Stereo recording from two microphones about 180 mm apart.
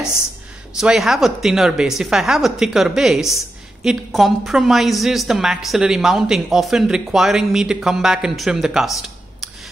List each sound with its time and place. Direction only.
0.7 s a woman's voice: centre (ahead or behind)